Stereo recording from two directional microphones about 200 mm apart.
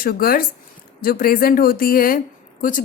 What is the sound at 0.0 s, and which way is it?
A woman's voice, 45° left (ahead or behind).